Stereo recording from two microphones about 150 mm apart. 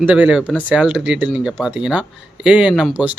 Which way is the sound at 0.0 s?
10° right (ahead or behind).